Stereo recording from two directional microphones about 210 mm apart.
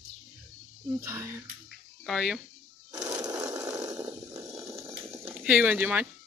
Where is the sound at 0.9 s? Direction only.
15° right (ahead or behind).